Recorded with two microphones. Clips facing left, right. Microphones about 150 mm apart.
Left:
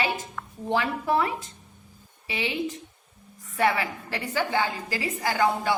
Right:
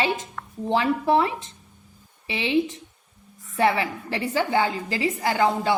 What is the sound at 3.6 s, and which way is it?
A woman's voice, 25° right (ahead or behind).